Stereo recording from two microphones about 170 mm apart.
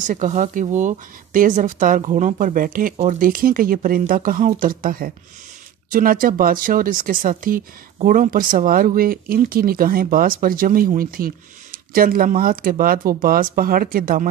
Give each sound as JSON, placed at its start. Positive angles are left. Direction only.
{"t": 0.0, "sound": "speech", "side_deg": -50}